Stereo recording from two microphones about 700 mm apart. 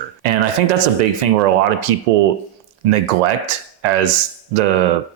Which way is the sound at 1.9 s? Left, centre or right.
Right.